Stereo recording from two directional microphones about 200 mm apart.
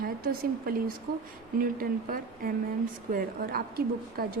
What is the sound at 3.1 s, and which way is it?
A woman's voice, 45° right (ahead or behind).